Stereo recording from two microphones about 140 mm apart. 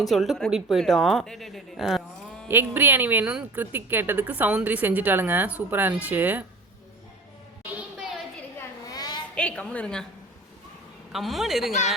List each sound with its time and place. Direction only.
0.0 s speech: centre (ahead or behind)
2.5 s speech: 15° right (ahead or behind)
7.6 s a sound: 10° right (ahead or behind)
8.5 s a sound: 25° left (ahead or behind)
9.3 s a woman's voice: 10° left (ahead or behind)
11.1 s speech: centre (ahead or behind)